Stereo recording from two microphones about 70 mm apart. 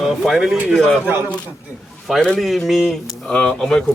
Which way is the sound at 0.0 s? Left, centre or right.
Centre.